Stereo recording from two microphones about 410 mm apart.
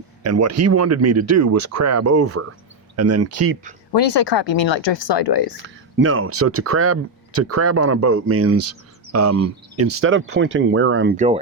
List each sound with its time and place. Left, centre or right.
0.2 s speech: right
3.9 s speech: left
5.5 s speech: right